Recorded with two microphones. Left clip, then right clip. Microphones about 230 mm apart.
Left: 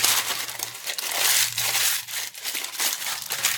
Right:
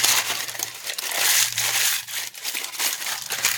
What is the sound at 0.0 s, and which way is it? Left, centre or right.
Crumpling, centre.